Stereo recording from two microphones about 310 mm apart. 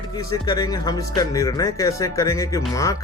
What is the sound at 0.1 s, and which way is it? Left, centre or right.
Speech, centre.